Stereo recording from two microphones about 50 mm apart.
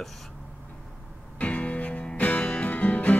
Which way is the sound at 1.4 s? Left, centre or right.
Left.